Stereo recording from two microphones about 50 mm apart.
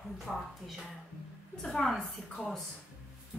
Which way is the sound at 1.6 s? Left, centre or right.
Centre.